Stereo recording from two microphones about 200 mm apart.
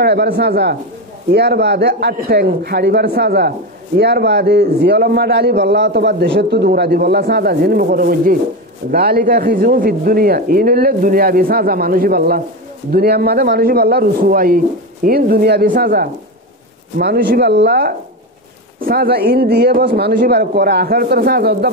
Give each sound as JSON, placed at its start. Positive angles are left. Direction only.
{"t": 0.0, "sound": "a man's voice", "side_deg": -55}